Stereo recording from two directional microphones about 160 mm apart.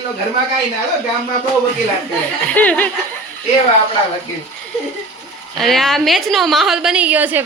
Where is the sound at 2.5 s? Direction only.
10° left (ahead or behind).